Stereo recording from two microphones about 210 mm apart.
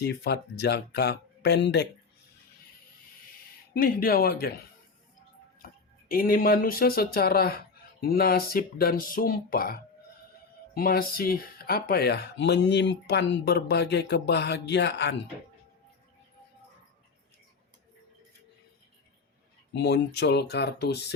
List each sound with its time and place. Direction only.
0.0 s speech: 50° left (ahead or behind)
3.8 s speech: 45° left (ahead or behind)
6.1 s speech: 45° left (ahead or behind)
19.7 s speech: 55° left (ahead or behind)